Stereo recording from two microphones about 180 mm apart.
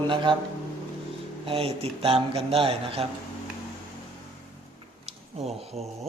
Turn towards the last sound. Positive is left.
turn(degrees=-35)  # may be behind; listen again after turning